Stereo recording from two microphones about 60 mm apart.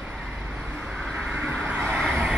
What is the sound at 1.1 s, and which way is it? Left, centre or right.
Vehicle, right.